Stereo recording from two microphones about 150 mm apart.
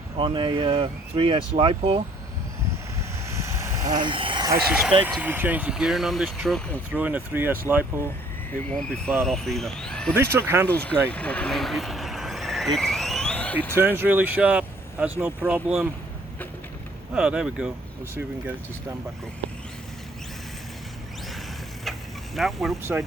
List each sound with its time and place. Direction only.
0.2 s speech: 35° right (ahead or behind)
3.2 s vehicle: 15° right (ahead or behind)
3.9 s speech: 35° right (ahead or behind)
4.7 s speech: 5° right (ahead or behind)
6.9 s speech: 10° right (ahead or behind)
8.7 s speech: 5° left (ahead or behind)
10.2 s speech: 15° right (ahead or behind)
10.7 s vehicle: 10° left (ahead or behind)
13.7 s speech: 15° right (ahead or behind)
17.2 s speech: 5° right (ahead or behind)
18.1 s speech: 15° right (ahead or behind)
22.4 s speech: centre (ahead or behind)
22.8 s speech: 15° right (ahead or behind)